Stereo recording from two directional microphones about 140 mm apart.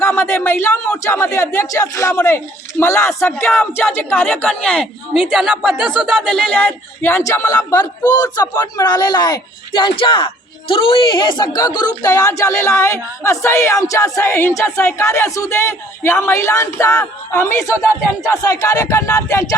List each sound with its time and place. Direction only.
0.0 s a woman's voice: 20° left (ahead or behind)
5.1 s speech: 5° right (ahead or behind)
6.3 s speech: 10° left (ahead or behind)